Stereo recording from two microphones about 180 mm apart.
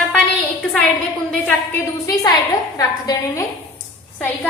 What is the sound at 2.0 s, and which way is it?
A woman's voice, 20° left (ahead or behind).